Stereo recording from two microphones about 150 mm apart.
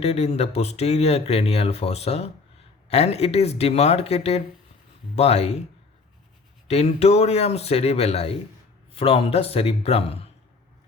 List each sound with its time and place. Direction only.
0.0 s speech: 45° left (ahead or behind)
6.7 s speech: 45° left (ahead or behind)